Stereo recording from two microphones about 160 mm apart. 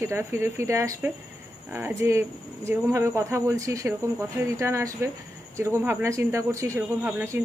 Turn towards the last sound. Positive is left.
turn(degrees=-15)  # may be behind; listen again after turning